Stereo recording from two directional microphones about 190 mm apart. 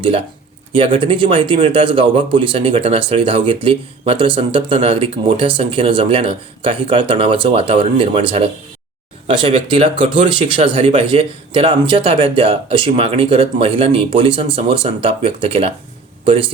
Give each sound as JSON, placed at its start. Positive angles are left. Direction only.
{"t": 0.7, "sound": "speech", "side_deg": -25}